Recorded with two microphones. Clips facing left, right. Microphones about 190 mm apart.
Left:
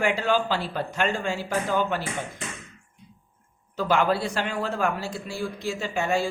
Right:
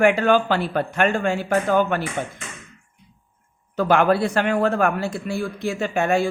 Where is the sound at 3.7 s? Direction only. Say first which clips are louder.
Right 5 dB; 60° right (ahead or behind).